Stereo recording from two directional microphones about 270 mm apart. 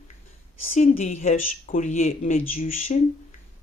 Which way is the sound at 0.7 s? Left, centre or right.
Left.